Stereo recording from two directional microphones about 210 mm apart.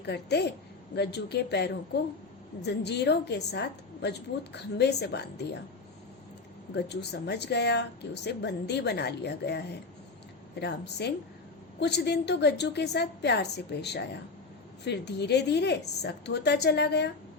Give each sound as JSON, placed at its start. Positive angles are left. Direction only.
{"t": 0.0, "sound": "speech", "side_deg": 50}
{"t": 6.7, "sound": "speech", "side_deg": 55}